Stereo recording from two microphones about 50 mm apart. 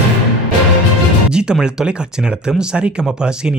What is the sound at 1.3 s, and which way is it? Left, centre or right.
Speech, centre.